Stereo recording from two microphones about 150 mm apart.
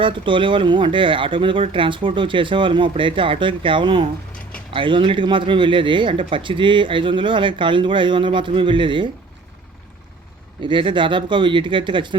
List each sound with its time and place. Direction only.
0.0 s speech: 35° right (ahead or behind)
10.6 s speech: 35° right (ahead or behind)